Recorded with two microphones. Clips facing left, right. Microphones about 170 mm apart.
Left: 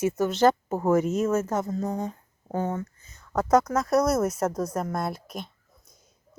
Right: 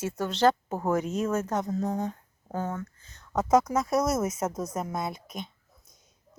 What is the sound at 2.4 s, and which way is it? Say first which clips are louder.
Speech: left 4 dB; 20° left (ahead or behind).